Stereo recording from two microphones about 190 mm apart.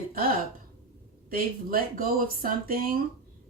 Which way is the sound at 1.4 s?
50° right (ahead or behind).